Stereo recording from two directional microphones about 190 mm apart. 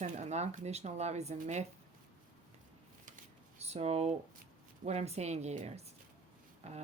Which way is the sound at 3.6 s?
35° right (ahead or behind).